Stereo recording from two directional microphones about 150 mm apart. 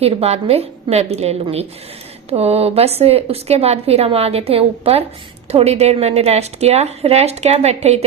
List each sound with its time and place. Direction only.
0.0 s a woman's voice: 40° right (ahead or behind)